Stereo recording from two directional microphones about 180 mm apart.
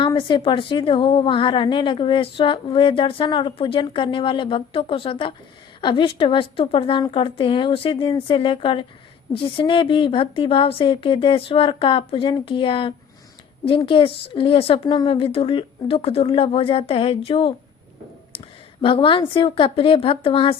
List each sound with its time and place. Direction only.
0.0 s a woman's voice: 25° left (ahead or behind)